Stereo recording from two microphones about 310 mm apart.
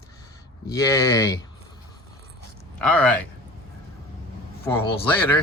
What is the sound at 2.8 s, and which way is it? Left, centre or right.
Speech, centre.